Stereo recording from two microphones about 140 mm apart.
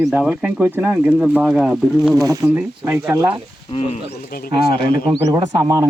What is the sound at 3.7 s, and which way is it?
Speech, 40° left (ahead or behind).